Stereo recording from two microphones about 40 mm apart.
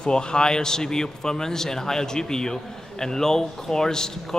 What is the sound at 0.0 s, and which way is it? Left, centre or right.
A man's voice, left.